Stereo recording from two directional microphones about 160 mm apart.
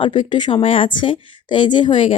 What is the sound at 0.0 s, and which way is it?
A woman's voice, 30° left (ahead or behind).